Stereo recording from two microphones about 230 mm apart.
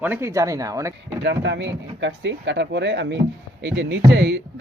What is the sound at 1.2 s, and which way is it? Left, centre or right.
Speech, right.